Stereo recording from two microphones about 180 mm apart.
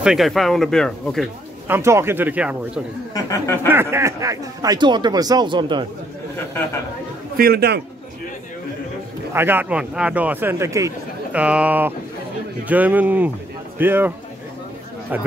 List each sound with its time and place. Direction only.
0.0 s speech: centre (ahead or behind)
1.7 s speech: 15° right (ahead or behind)
3.2 s speech: 20° left (ahead or behind)
3.6 s speech: 15° right (ahead or behind)
7.3 s a man's voice: 60° right (ahead or behind)
9.3 s speech: 10° right (ahead or behind)